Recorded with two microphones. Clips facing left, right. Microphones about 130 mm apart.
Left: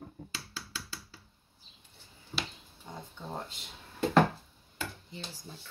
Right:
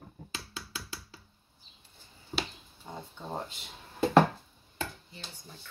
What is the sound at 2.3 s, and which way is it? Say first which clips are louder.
Finger snapping: right 3 dB; 40° right (ahead or behind).